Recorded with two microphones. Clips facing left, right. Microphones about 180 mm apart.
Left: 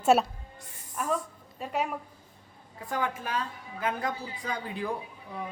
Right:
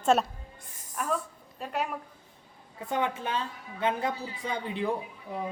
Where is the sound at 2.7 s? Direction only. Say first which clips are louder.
Right 2 dB; 25° right (ahead or behind).